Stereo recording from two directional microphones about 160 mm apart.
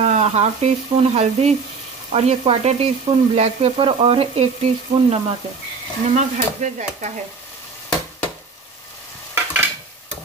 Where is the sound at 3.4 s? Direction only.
35° right (ahead or behind).